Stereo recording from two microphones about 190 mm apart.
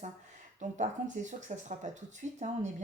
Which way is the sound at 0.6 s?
40° right (ahead or behind).